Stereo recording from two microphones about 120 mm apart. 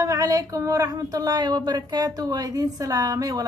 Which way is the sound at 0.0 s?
25° right (ahead or behind).